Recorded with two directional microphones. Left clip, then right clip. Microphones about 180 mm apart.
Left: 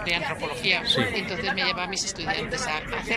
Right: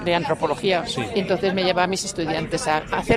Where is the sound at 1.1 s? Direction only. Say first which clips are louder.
Right 6 dB; 50° right (ahead or behind).